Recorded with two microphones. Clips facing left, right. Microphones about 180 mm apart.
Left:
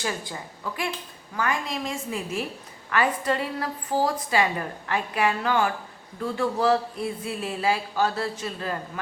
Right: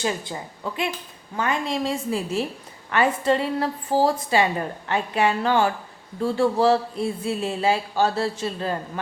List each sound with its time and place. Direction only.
0.0 s a woman's voice: 25° right (ahead or behind)